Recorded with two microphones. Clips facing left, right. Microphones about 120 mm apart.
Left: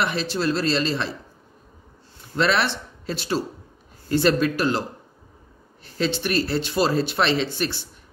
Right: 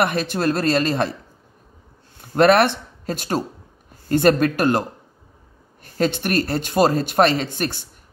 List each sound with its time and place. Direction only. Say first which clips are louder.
0.0 s speech: right 4 dB; 50° right (ahead or behind)
2.3 s speech: right 7 dB; 55° right (ahead or behind)
5.9 s speech: right 3 dB; 50° right (ahead or behind)